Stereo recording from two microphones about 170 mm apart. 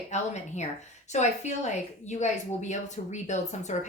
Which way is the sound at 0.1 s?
40° left (ahead or behind).